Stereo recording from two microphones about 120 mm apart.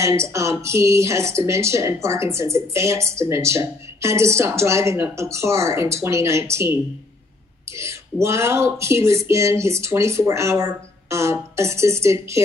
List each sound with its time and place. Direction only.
0.0 s speech: 25° right (ahead or behind)